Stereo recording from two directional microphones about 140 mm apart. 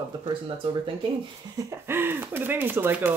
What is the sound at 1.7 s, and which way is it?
Speech, 15° right (ahead or behind).